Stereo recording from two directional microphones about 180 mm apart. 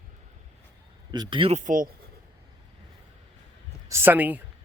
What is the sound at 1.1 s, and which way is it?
Speech, 25° right (ahead or behind).